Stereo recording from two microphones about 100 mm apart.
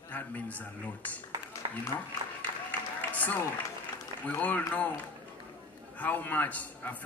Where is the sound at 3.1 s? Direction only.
15° left (ahead or behind).